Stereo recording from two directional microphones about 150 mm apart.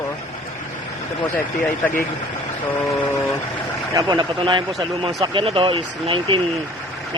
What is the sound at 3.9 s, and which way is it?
Speech, 30° right (ahead or behind).